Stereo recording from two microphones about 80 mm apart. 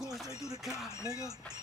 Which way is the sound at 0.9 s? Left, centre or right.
Left.